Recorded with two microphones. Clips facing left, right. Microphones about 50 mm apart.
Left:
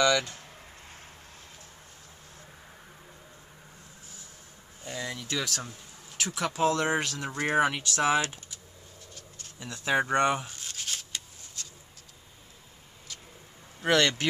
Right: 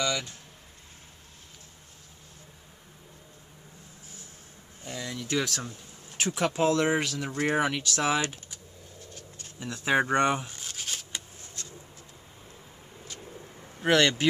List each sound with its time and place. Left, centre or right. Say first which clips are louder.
0.0 s speech: left 6 dB; left
5.3 s speech: right 5 dB; centre
6.1 s speech: right 3 dB; right
6.8 s speech: right 2 dB; centre
7.1 s speech: right 2 dB; centre
7.7 s speech: right 2 dB; centre
9.6 s speech: right 2 dB; centre
10.1 s a sound: even; centre
13.7 s speech: right 1 dB; right